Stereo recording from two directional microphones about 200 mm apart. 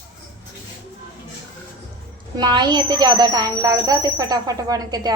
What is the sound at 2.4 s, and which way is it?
Speech, 20° right (ahead or behind).